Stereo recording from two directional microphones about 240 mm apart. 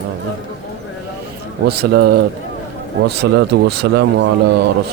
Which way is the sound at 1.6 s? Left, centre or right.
Right.